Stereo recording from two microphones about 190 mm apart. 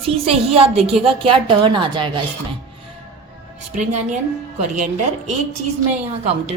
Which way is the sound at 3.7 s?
40° right (ahead or behind).